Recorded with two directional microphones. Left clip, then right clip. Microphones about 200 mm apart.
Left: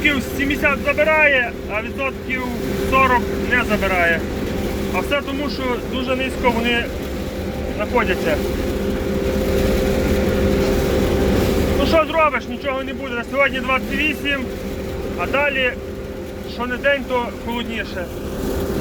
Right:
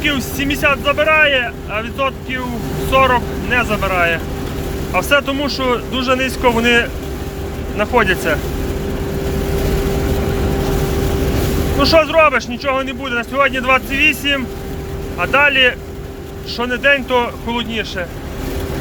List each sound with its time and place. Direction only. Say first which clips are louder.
0.0 s speech: even; 35° right (ahead or behind)
4.9 s speech: right 8 dB; 45° right (ahead or behind)
7.8 s speech: right 5 dB; 40° right (ahead or behind)
11.9 s speech: right 6 dB; 45° right (ahead or behind)